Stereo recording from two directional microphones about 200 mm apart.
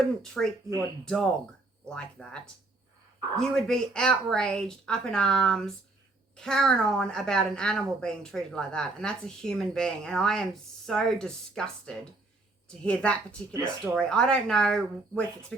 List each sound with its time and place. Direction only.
0.4 s a woman's voice: centre (ahead or behind)